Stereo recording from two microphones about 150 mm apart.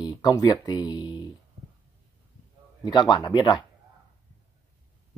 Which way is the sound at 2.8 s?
30° left (ahead or behind).